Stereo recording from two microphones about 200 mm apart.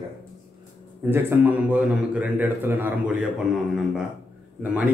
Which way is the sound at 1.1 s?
10° right (ahead or behind).